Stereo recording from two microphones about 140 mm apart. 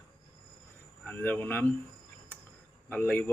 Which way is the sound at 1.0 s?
10° left (ahead or behind).